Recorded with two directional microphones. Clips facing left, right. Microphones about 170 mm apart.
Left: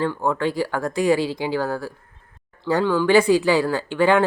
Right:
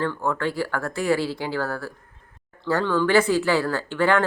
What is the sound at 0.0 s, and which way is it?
Speech, 15° left (ahead or behind).